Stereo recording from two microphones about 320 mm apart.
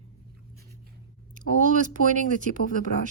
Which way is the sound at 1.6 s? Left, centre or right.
Right.